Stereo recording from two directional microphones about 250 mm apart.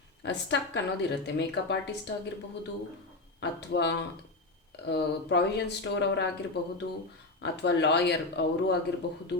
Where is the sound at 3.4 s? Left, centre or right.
Left.